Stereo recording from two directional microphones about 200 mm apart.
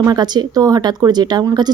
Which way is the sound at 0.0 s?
20° right (ahead or behind).